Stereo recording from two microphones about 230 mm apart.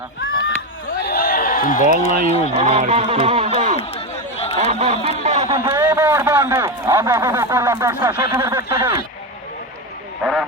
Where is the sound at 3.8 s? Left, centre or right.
Left.